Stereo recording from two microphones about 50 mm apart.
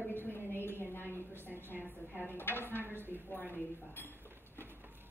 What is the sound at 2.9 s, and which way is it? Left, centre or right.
Speech, right.